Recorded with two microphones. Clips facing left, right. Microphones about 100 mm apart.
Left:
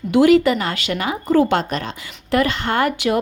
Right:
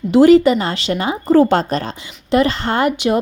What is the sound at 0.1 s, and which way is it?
A woman's voice, 30° right (ahead or behind).